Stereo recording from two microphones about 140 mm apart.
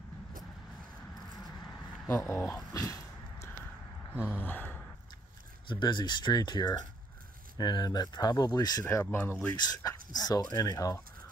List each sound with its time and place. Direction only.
2.0 s a sound: 20° left (ahead or behind)
4.1 s gasp: 10° right (ahead or behind)
4.4 s gasp: 15° left (ahead or behind)
5.7 s speech: 35° left (ahead or behind)
8.8 s speech: 15° left (ahead or behind)
9.5 s speech: 25° left (ahead or behind)